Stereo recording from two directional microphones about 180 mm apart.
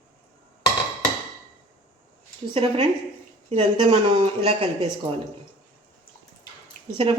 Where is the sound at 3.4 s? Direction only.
30° right (ahead or behind).